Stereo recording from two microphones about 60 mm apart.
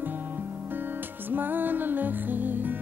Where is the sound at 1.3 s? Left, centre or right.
Right.